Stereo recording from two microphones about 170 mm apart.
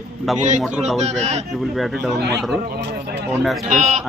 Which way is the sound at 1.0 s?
40° right (ahead or behind).